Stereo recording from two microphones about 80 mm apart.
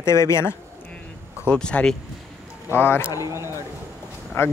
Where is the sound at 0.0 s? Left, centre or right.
Left.